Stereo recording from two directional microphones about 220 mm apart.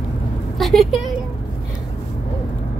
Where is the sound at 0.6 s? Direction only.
Centre (ahead or behind).